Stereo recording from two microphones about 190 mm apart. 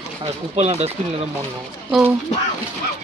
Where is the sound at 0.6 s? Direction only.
35° right (ahead or behind).